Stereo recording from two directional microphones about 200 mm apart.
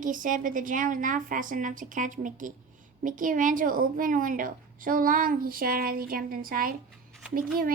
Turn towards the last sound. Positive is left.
turn(degrees=-45)  # may be behind; listen again after turning